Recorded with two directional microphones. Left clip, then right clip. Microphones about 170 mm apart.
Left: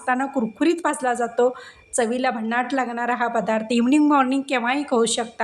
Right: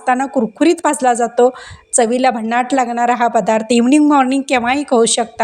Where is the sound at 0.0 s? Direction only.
35° right (ahead or behind).